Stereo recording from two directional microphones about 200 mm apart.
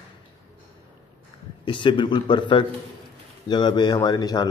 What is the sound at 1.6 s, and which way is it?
A man's voice, 25° left (ahead or behind).